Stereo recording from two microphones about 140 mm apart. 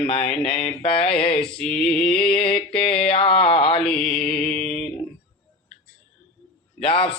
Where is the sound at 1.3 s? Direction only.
5° left (ahead or behind).